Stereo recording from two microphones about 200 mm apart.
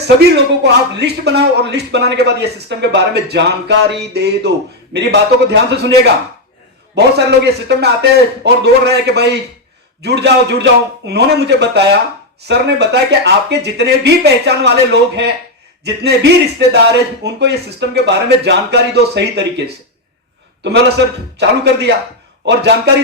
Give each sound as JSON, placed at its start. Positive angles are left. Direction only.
{"t": 0.2, "sound": "a man's voice", "side_deg": -55}